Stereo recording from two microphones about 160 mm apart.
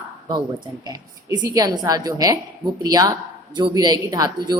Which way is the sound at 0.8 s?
25° right (ahead or behind).